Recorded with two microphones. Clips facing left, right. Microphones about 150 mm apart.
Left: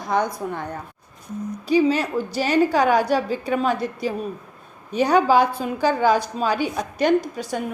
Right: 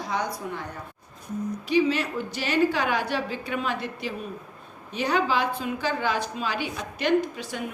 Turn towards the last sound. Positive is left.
turn(degrees=40)  # may be behind; listen again after turning